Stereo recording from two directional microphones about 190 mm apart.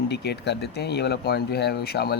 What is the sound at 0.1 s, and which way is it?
Speech, 60° left (ahead or behind).